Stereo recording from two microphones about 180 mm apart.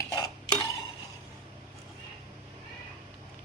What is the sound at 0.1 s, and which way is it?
Stir, 20° left (ahead or behind).